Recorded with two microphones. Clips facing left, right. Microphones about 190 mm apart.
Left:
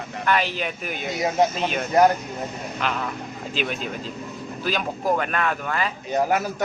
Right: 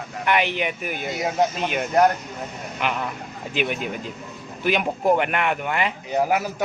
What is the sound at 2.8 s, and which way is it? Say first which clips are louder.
Speech: right 1 dB; 10° right (ahead or behind).